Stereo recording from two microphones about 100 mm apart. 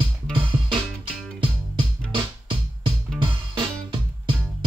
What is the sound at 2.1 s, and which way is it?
Music, 60° right (ahead or behind).